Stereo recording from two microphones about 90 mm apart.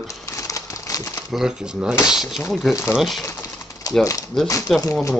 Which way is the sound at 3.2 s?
40° left (ahead or behind).